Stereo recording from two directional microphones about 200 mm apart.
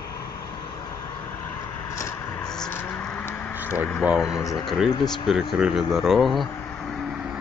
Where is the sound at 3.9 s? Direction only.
Centre (ahead or behind).